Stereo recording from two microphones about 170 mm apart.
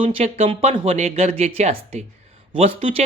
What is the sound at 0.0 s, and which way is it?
Speech, 35° right (ahead or behind).